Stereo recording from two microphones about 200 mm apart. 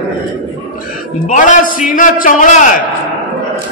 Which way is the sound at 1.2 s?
40° left (ahead or behind).